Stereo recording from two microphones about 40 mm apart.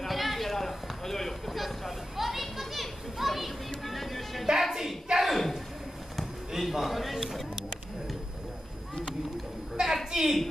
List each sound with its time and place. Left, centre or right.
0.0 s run: centre
1.5 s children playing: centre
4.5 s music: centre
5.2 s a sound: centre
6.5 s a man's voice: centre
9.8 s a sound: centre
10.1 s a woman's voice: centre